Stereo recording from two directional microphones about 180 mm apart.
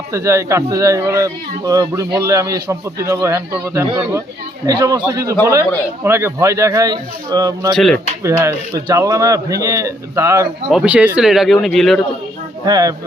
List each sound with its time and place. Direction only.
0.1 s a man's voice: 15° right (ahead or behind)
7.8 s speech: centre (ahead or behind)
8.2 s a man's voice: 15° right (ahead or behind)
10.7 s speech: 5° right (ahead or behind)
12.6 s speech: 20° right (ahead or behind)